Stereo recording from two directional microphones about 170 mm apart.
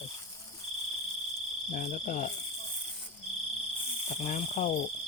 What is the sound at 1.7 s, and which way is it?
Cricket, 50° left (ahead or behind).